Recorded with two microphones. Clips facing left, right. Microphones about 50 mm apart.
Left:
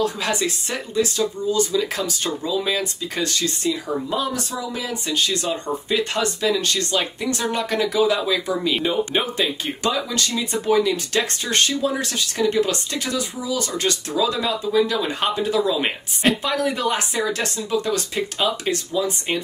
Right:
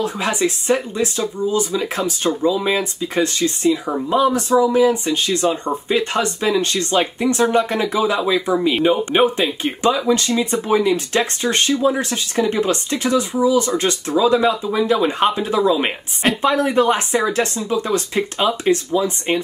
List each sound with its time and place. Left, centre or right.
0.0 s speech: right